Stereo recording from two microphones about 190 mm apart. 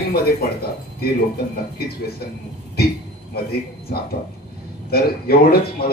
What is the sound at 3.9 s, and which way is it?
Speech, 50° left (ahead or behind).